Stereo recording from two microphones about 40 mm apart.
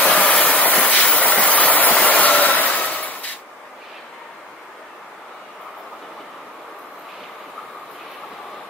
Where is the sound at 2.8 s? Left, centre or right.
Left.